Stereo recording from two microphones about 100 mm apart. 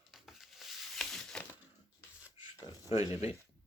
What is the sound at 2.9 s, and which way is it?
Speech, 90° left.